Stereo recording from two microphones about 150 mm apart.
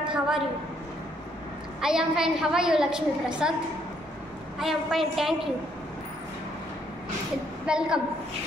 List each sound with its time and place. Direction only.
0.0 s a woman's voice: 5° right (ahead or behind)
1.8 s a woman's voice: 5° right (ahead or behind)
4.6 s a woman's voice: centre (ahead or behind)
7.6 s a woman's voice: 5° right (ahead or behind)